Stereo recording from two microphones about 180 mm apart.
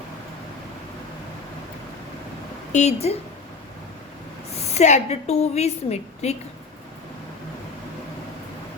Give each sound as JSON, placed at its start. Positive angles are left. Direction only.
{"t": 2.7, "sound": "a woman's voice", "side_deg": 35}
{"t": 4.7, "sound": "a woman's voice", "side_deg": 40}